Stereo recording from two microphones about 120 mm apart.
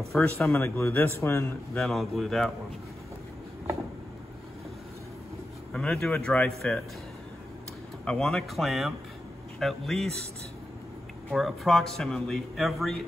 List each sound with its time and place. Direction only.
0.1 s a man's voice: 5° left (ahead or behind)
0.5 s a man's voice: 20° left (ahead or behind)
1.8 s a man's voice: centre (ahead or behind)
5.7 s speech: 5° left (ahead or behind)
8.0 s a man's voice: 5° left (ahead or behind)
11.3 s a man's voice: centre (ahead or behind)